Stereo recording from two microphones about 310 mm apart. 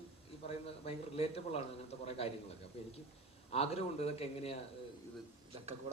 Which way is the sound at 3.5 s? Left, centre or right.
Centre.